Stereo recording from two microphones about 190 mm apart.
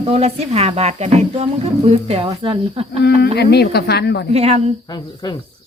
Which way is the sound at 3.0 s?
60° left (ahead or behind).